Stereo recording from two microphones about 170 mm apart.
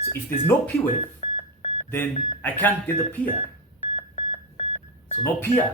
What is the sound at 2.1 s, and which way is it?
Speech, 30° left (ahead or behind).